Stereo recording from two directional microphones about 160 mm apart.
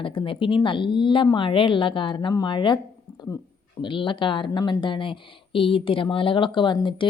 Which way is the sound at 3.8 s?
30° left (ahead or behind).